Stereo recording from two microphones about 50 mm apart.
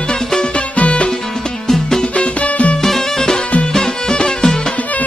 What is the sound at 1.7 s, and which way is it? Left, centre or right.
Music, centre.